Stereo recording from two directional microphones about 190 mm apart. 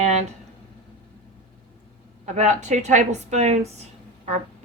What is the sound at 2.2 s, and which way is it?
A woman's voice, 40° right (ahead or behind).